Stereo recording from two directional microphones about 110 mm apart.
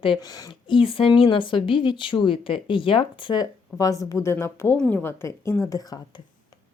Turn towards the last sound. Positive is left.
turn(degrees=35)  # may be behind; listen again after turning